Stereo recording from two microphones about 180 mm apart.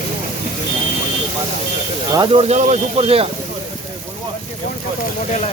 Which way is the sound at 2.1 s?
25° right (ahead or behind).